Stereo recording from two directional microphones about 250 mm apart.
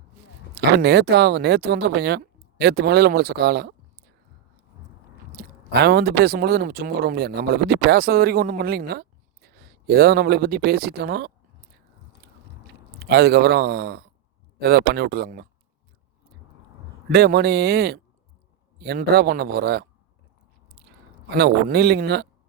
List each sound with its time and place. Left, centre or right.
0.5 s speech: right
5.3 s speech: right
13.0 s speech: right
17.1 s speech: right
21.2 s speech: right